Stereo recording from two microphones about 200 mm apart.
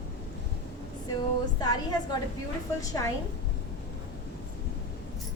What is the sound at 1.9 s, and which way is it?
Speech, 20° left (ahead or behind).